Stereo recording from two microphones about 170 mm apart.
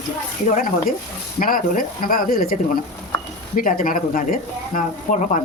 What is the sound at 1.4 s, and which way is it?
Speech, 55° left (ahead or behind).